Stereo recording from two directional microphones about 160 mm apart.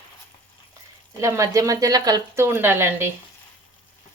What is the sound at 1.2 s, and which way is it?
Speech, 20° right (ahead or behind).